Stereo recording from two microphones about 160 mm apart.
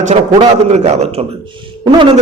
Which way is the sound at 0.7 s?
45° right (ahead or behind).